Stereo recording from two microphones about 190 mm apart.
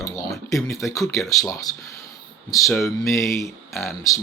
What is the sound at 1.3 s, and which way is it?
Speech, 20° left (ahead or behind).